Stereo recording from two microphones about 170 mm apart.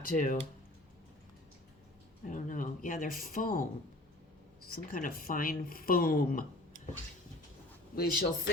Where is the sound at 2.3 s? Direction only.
50° left (ahead or behind).